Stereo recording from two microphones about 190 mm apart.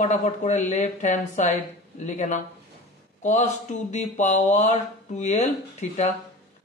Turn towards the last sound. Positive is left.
turn(degrees=35)  # may be behind; listen again after turning